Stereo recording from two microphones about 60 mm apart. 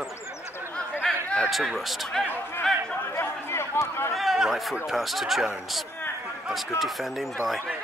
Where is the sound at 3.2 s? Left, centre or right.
Left.